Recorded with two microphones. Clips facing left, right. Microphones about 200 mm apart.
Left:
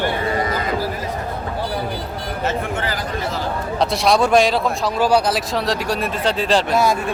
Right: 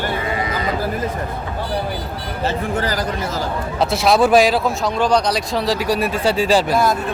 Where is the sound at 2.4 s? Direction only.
40° right (ahead or behind).